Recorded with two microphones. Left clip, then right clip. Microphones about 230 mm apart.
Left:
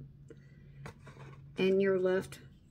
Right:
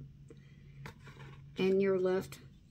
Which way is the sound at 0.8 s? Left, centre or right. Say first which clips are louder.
Left 1 dB; centre.